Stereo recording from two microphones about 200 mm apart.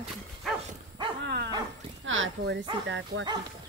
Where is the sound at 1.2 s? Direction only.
55° right (ahead or behind).